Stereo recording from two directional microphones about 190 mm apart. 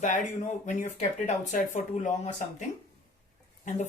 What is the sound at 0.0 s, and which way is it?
Speech, 40° left (ahead or behind).